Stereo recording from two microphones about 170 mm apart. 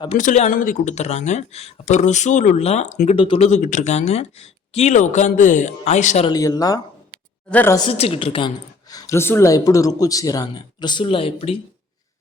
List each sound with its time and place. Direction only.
0.2 s speech: 45° left (ahead or behind)
6.2 s a woman's voice: 20° left (ahead or behind)
7.8 s a woman's voice: 35° left (ahead or behind)